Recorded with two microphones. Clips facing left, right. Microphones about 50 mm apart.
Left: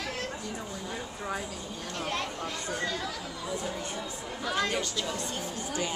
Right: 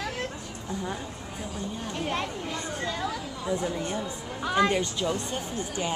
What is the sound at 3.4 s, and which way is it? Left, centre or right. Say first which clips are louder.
A woman's voice: right 6 dB; right.